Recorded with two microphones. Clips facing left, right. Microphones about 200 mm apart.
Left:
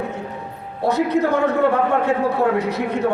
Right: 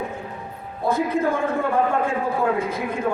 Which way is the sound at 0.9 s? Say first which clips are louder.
Left 3 dB; 75° left (ahead or behind).